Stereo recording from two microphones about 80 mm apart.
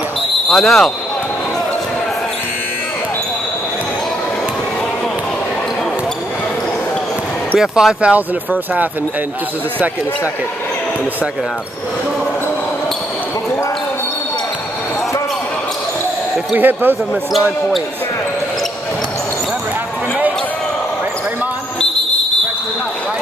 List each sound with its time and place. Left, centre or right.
0.5 s speech: centre
7.5 s speech: centre
16.5 s speech: right